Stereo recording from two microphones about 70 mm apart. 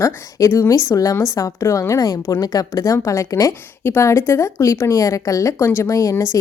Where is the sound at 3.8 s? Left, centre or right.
Left.